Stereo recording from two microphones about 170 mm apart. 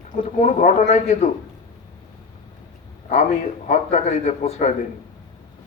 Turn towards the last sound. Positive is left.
turn(degrees=40)  # may be behind; listen again after turning